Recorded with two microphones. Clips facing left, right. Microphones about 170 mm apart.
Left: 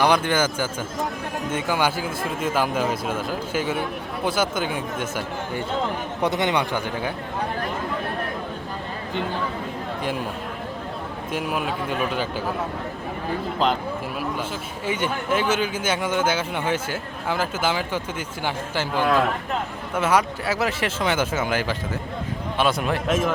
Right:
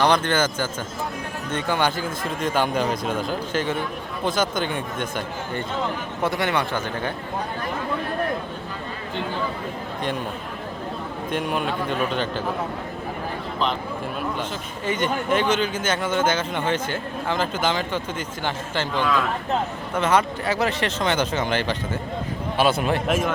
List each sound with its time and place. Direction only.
0.0 s a man's voice: 10° left (ahead or behind)
6.2 s a man's voice: 20° left (ahead or behind)
11.3 s speech: 5° left (ahead or behind)
14.8 s a man's voice: 10° left (ahead or behind)
19.0 s speech: 50° left (ahead or behind)
20.0 s speech: 5° left (ahead or behind)